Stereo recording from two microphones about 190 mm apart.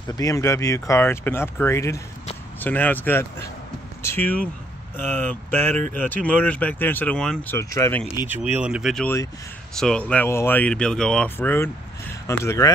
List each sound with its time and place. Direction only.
0.0 s speech: 20° left (ahead or behind)
8.5 s speech: 5° right (ahead or behind); by 12.7 s 15° left (ahead or behind)